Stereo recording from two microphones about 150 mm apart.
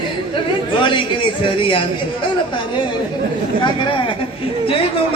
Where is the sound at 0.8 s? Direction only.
35° left (ahead or behind).